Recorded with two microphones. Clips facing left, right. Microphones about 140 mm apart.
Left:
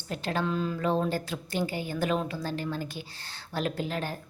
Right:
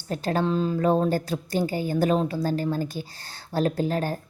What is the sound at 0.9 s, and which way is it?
A woman's voice, 45° right (ahead or behind).